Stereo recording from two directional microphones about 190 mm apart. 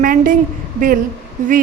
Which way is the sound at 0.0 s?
50° right (ahead or behind).